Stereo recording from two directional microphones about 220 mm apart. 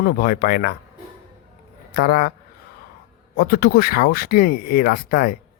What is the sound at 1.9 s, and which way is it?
Speech, 40° left (ahead or behind).